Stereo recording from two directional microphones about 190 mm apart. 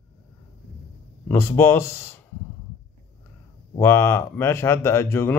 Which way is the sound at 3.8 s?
15° left (ahead or behind).